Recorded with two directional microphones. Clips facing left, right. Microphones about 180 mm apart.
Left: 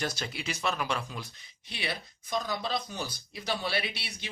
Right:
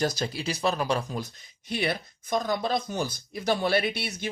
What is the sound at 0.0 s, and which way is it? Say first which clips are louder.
Speech: right 7 dB; 40° right (ahead or behind).